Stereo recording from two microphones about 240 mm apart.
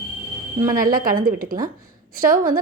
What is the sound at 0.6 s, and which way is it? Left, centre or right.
A woman's voice, right.